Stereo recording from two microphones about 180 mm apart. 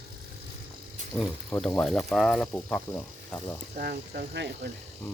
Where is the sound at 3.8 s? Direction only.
60° right (ahead or behind).